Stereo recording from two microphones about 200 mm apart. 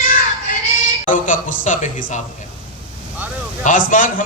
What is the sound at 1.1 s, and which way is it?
A man's voice, 40° left (ahead or behind).